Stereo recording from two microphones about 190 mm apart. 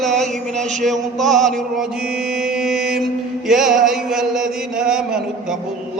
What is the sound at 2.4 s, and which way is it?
Mantra, centre (ahead or behind).